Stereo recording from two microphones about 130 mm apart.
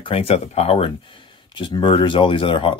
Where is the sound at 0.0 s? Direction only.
45° left (ahead or behind).